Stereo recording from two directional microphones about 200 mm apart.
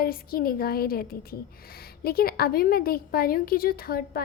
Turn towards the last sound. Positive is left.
turn(degrees=50)  # may be behind; listen again after turning